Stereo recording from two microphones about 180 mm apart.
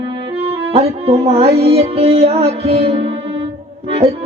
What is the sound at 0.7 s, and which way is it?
Speech, 35° right (ahead or behind).